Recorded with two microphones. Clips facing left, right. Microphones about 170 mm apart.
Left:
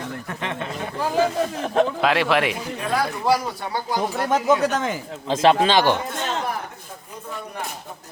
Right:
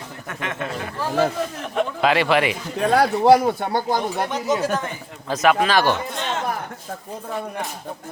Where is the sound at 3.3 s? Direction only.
55° right (ahead or behind).